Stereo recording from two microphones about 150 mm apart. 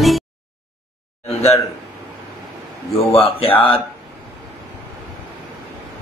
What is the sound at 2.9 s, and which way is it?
Speech, 40° left (ahead or behind).